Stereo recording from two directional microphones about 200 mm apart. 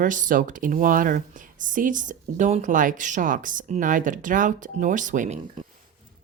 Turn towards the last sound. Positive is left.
turn(degrees=-40)  # may be behind; listen again after turning